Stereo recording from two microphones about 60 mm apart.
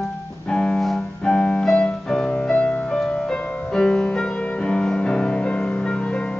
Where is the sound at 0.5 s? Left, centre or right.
Centre.